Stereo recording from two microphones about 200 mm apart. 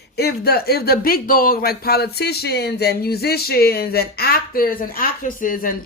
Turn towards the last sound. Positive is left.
turn(degrees=45)  # may be behind; listen again after turning